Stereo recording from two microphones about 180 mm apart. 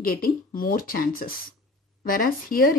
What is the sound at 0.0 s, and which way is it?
Speech, 55° left (ahead or behind).